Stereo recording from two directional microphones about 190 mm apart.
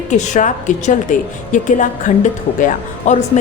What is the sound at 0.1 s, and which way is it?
A woman's voice, 40° left (ahead or behind).